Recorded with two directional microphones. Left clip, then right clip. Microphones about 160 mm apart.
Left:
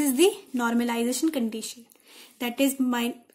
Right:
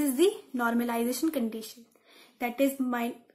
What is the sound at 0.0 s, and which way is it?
A woman's voice, 40° left (ahead or behind).